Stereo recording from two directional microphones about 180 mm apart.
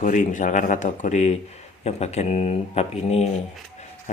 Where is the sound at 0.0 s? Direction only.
45° left (ahead or behind).